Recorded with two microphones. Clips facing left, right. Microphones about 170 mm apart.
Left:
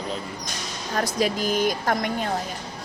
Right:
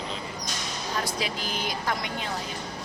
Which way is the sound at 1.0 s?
45° left (ahead or behind).